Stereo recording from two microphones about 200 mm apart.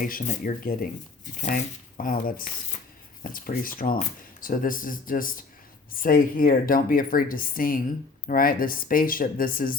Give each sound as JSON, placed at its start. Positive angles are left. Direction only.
{"t": 0.0, "sound": "speech", "side_deg": 45}